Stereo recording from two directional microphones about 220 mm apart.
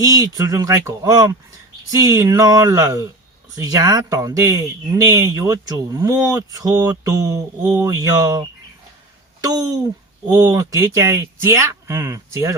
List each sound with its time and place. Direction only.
0.2 s speech: 15° right (ahead or behind)